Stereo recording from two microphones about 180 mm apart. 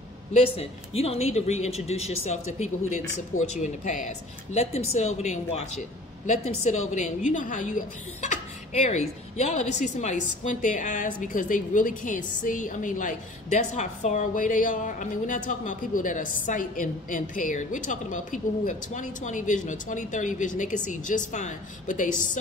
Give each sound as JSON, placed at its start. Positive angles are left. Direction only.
{"t": 0.3, "sound": "speech", "side_deg": 35}